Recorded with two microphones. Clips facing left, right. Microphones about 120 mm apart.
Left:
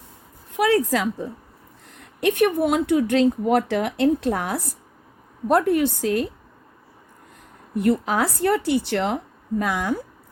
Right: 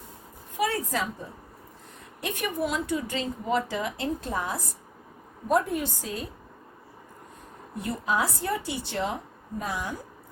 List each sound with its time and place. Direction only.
0.5 s a woman's voice: 75° left (ahead or behind); by 1.3 s 90° left
2.0 s speech: 70° left (ahead or behind)
7.8 s speech: 65° left (ahead or behind)
9.6 s a woman's voice: 90° left